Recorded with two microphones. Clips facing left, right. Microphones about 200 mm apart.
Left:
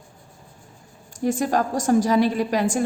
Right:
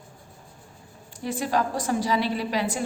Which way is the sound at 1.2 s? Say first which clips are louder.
Left 4 dB; 45° left (ahead or behind).